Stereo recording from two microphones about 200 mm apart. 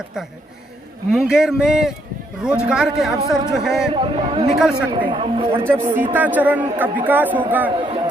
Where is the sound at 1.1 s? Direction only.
5° right (ahead or behind).